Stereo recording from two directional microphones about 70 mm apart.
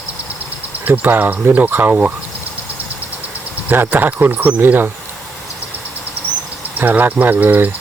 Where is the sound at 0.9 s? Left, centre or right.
Right.